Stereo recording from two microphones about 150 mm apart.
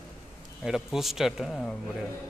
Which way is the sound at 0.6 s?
5° right (ahead or behind).